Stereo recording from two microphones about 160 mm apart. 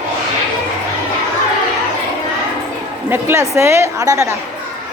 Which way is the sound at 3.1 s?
15° right (ahead or behind).